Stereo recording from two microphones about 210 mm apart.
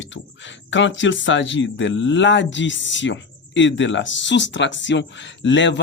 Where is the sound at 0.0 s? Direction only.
60° left (ahead or behind).